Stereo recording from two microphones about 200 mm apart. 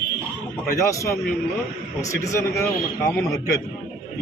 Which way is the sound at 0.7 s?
15° left (ahead or behind).